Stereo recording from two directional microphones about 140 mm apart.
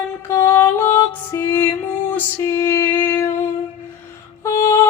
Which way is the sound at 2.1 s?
20° left (ahead or behind).